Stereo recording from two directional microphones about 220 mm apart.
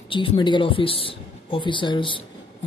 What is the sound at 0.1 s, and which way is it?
A woman's voice, 20° left (ahead or behind).